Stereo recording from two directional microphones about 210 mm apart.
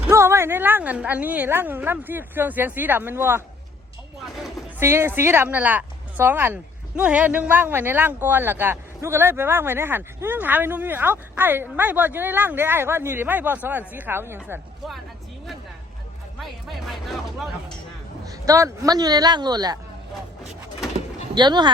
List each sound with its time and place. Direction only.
0.1 s speech: 10° right (ahead or behind)
4.4 s speech: 10° right (ahead or behind)
16.4 s speech: centre (ahead or behind)
18.3 s a man's voice: 15° right (ahead or behind)
21.3 s a man's voice: 20° right (ahead or behind)